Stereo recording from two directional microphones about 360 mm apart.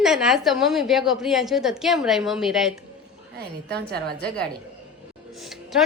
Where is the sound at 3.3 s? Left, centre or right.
Right.